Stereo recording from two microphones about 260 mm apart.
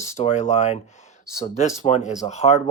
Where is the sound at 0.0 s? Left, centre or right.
Left.